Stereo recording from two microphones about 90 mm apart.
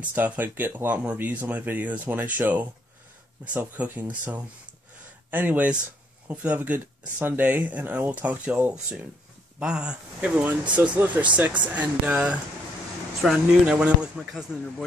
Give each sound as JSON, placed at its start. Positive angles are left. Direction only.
{"t": 0.1, "sound": "speech", "side_deg": -20}
{"t": 13.2, "sound": "speech", "side_deg": 0}
{"t": 13.7, "sound": "speech", "side_deg": -10}
{"t": 14.3, "sound": "speech", "side_deg": 0}